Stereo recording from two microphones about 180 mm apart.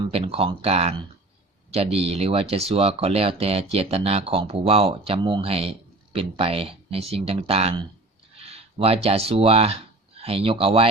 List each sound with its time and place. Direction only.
0.1 s speech: 30° right (ahead or behind)